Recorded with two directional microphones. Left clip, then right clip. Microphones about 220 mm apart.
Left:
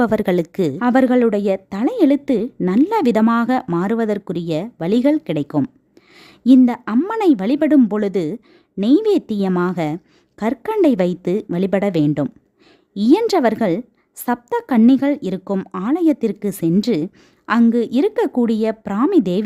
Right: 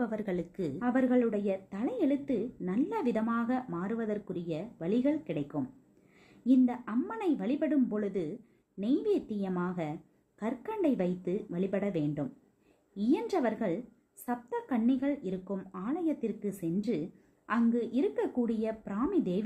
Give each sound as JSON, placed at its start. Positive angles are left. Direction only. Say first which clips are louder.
{"t": 0.0, "sound": "speech", "louder": "left 17 dB", "side_deg": 50}